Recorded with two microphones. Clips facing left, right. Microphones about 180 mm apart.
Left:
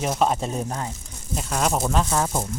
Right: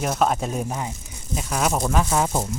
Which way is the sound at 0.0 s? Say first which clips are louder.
Even; centre (ahead or behind).